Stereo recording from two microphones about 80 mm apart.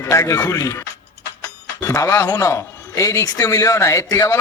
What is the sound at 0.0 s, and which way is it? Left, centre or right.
Speech, left.